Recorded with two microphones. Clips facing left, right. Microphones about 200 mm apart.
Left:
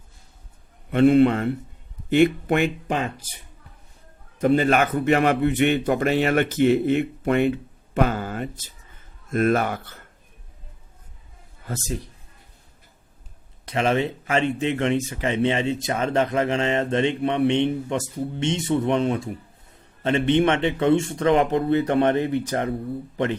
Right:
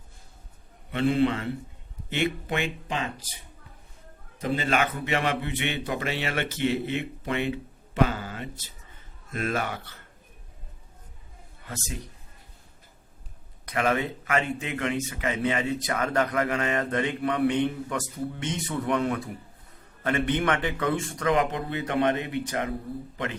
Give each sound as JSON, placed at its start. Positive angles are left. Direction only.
{"t": 0.9, "sound": "a man's voice", "side_deg": 55}
{"t": 4.4, "sound": "a man's voice", "side_deg": 50}
{"t": 11.6, "sound": "a man's voice", "side_deg": 40}
{"t": 13.7, "sound": "a man's voice", "side_deg": 25}